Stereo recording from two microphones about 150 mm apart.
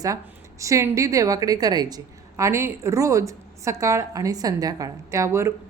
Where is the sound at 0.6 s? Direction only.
20° right (ahead or behind).